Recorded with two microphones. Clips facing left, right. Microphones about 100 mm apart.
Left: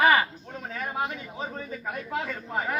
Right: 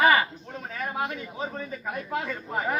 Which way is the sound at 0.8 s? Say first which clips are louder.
Right 1 dB; centre (ahead or behind).